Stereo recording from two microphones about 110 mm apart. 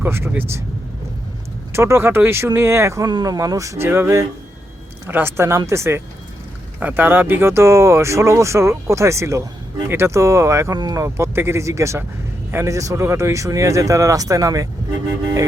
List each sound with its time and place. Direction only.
0.0 s speech: 20° right (ahead or behind)
1.7 s speech: 25° right (ahead or behind)
3.1 s speech: 35° right (ahead or behind)
10.8 s speech: 40° right (ahead or behind)
11.0 s speech: 25° right (ahead or behind)